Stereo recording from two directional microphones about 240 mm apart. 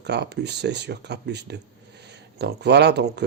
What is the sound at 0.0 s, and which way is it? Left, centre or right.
Speech, right.